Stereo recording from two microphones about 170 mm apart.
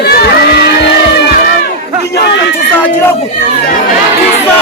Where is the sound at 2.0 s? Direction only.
80° left.